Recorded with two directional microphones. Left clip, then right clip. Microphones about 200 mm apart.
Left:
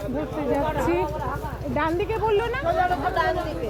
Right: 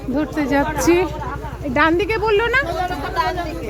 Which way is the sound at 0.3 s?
35° right (ahead or behind).